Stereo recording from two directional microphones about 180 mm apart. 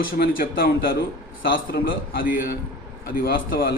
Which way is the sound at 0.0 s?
55° left (ahead or behind).